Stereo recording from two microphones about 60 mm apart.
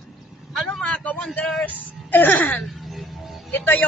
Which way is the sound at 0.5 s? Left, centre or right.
Centre.